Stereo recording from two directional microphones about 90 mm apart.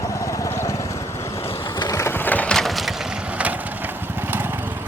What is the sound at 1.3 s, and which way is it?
Vehicle, 90° left.